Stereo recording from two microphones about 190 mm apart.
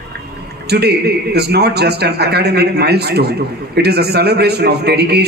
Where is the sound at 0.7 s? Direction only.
60° right (ahead or behind).